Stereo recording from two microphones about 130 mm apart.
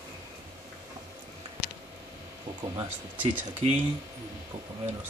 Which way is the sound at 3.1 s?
10° right (ahead or behind).